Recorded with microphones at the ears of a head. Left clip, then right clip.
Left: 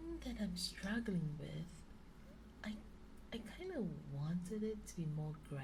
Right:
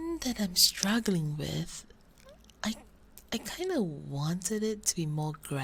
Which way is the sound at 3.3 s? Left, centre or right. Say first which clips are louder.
Right 14 dB; right.